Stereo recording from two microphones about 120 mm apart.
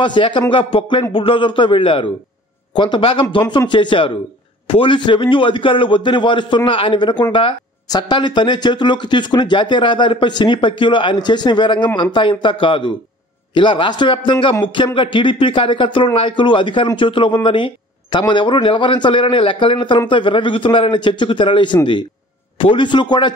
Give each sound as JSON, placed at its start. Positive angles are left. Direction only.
{"t": 0.0, "sound": "a man's voice", "side_deg": 45}